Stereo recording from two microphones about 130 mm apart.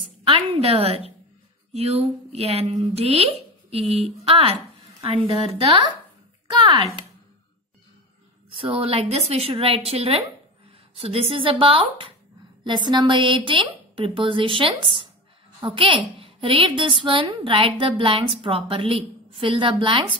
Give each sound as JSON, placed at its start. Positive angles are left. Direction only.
{"t": 0.6, "sound": "a woman's voice", "side_deg": -50}
{"t": 8.5, "sound": "a woman's voice", "side_deg": -45}
{"t": 12.6, "sound": "a woman's voice", "side_deg": -35}